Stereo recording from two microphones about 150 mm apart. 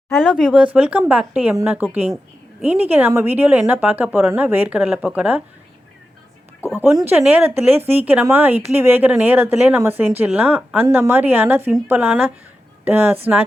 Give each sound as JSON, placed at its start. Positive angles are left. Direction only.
{"t": 0.4, "sound": "speech", "side_deg": -5}
{"t": 7.0, "sound": "a woman's voice", "side_deg": -10}